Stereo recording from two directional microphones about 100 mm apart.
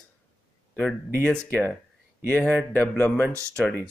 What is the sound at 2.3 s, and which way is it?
Speech, 10° left (ahead or behind).